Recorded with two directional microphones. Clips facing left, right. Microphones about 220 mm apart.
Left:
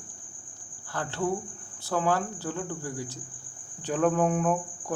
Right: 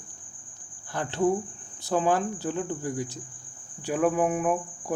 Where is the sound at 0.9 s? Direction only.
15° right (ahead or behind).